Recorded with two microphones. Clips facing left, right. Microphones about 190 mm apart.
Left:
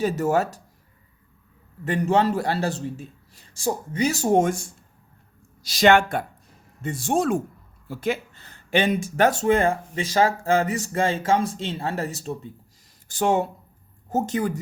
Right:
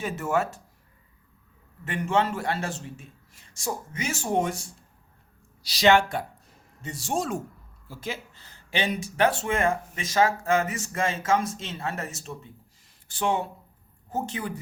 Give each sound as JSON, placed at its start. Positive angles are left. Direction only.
{"t": 0.0, "sound": "speech", "side_deg": 40}
{"t": 1.8, "sound": "speech", "side_deg": 35}